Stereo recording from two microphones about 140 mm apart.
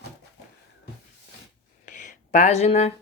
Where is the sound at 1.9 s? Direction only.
65° left (ahead or behind); by 2.9 s 50° left (ahead or behind).